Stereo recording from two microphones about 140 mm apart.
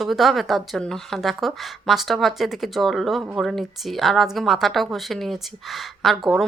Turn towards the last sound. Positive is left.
turn(degrees=0)  # may be behind; listen again after turning